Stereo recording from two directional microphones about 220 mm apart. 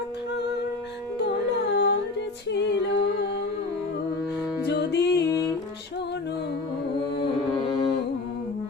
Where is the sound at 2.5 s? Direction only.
50° left (ahead or behind).